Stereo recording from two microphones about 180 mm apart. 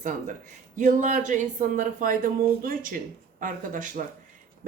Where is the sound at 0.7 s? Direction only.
45° right (ahead or behind).